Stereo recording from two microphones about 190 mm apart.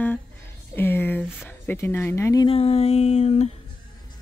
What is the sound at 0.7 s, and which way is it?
Speech, 10° left (ahead or behind).